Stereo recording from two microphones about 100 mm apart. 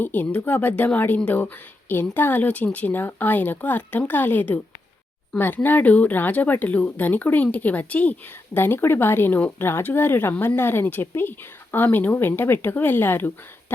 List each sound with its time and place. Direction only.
0.0 s speech: 15° left (ahead or behind)
5.6 s speech: 15° left (ahead or behind)